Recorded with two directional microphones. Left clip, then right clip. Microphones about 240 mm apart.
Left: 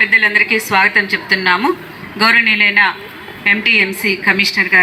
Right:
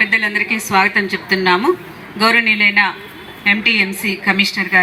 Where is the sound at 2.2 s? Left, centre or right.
Right.